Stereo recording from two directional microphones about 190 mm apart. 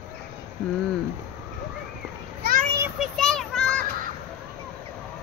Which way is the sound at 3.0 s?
Centre (ahead or behind).